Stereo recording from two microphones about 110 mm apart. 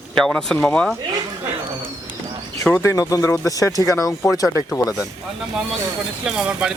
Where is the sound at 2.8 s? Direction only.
30° left (ahead or behind).